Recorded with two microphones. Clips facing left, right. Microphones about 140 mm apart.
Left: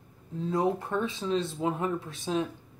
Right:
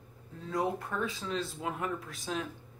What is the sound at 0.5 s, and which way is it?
Speech, 25° left (ahead or behind).